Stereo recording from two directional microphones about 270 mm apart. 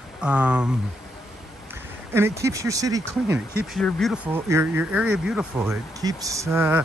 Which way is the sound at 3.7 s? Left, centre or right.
Centre.